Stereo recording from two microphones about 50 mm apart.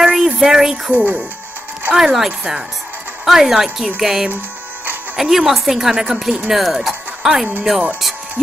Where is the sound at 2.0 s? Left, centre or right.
Centre.